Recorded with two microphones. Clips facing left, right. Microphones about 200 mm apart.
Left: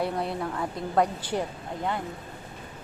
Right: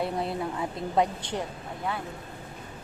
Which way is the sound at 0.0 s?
Centre (ahead or behind).